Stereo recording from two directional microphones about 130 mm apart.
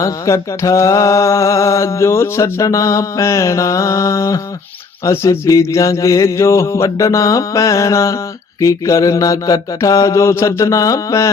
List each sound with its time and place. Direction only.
0.0 s mantra: 25° left (ahead or behind)